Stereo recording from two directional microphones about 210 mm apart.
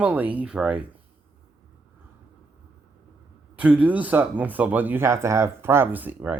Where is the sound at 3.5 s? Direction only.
5° right (ahead or behind).